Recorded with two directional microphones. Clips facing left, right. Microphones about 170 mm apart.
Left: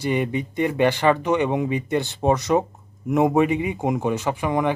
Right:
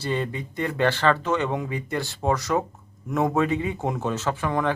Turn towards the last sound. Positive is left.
turn(degrees=15)  # may be behind; listen again after turning